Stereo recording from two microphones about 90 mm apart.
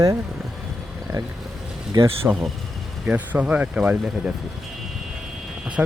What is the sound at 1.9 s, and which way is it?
Speech, 55° right (ahead or behind).